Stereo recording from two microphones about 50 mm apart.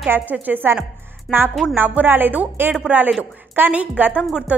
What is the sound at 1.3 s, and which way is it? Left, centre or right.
Speech, centre.